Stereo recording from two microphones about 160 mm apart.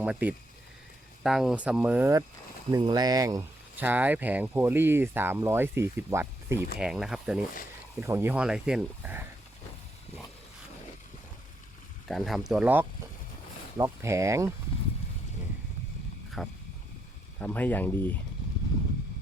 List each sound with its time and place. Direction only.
0.0 s speech: 10° right (ahead or behind)
2.7 s speech: 25° right (ahead or behind)
3.8 s speech: 10° right (ahead or behind)
6.7 s speech: 5° right (ahead or behind)
7.9 s speech: 15° right (ahead or behind)
12.0 s speech: centre (ahead or behind)
13.7 s speech: 20° right (ahead or behind)
16.4 s speech: centre (ahead or behind)
17.4 s speech: 10° left (ahead or behind)